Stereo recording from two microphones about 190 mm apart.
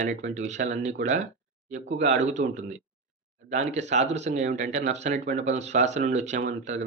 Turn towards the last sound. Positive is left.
turn(degrees=-40)  # may be behind; listen again after turning